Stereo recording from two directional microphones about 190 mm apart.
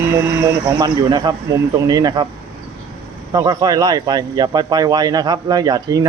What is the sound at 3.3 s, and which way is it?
Speech, 20° right (ahead or behind).